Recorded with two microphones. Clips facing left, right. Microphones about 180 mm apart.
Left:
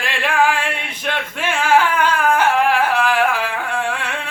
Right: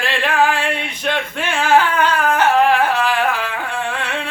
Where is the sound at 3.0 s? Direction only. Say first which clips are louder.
Left 1 dB; 10° left (ahead or behind).